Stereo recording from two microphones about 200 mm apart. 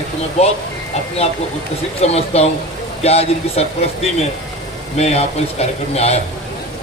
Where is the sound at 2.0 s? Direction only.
30° left (ahead or behind).